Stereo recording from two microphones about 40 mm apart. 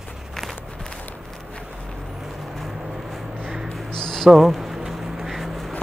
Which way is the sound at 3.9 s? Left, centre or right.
Centre.